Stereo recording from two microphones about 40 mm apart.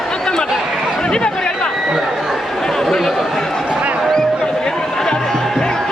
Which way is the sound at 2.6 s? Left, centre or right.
Centre.